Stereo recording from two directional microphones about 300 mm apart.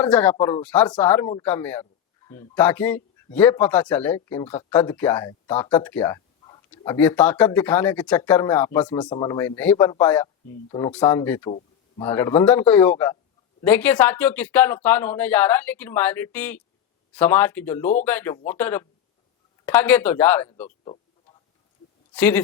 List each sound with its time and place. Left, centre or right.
0.0 s a man's voice: centre
20.8 s a sound: centre
22.1 s speech: centre